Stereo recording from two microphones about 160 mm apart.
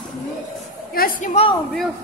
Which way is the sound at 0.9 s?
60° left (ahead or behind).